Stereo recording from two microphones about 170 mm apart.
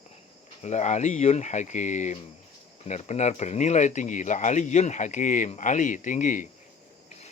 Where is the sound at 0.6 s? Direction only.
45° left (ahead or behind).